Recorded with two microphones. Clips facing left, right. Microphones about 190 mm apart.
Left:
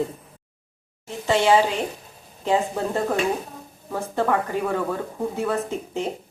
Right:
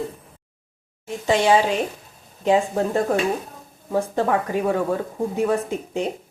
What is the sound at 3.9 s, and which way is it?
Speech, 15° right (ahead or behind).